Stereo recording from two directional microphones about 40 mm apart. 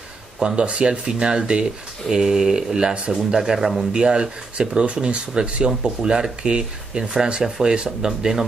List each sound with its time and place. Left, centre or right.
0.6 s speech: right
3.3 s speech: centre
3.9 s speech: right